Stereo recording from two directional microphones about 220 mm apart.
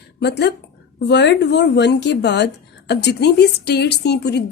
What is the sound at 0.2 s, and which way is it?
A woman's voice, 50° left (ahead or behind).